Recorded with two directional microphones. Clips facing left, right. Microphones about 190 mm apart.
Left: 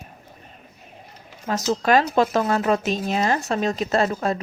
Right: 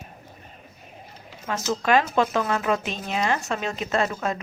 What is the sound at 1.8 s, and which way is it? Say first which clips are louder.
Speech: left 2 dB; 35° left (ahead or behind).